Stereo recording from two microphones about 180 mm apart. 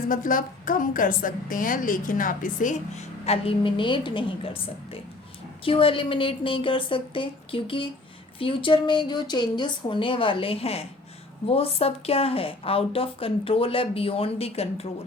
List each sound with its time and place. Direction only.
0.1 s a woman's voice: 50° left (ahead or behind)